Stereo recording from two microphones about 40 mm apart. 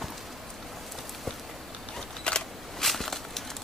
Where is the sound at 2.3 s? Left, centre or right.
Left.